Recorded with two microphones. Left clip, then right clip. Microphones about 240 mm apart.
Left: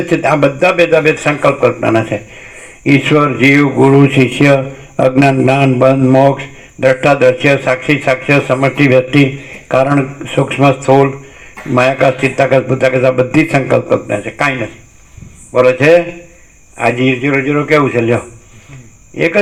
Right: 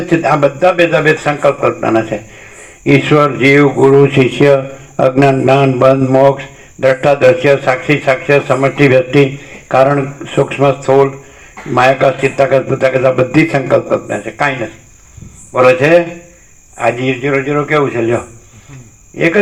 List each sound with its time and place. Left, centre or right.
0.2 s a man's voice: left
15.6 s a man's voice: left